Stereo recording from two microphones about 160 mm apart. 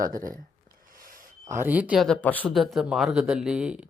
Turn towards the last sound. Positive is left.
turn(degrees=-5)  # may be behind; listen again after turning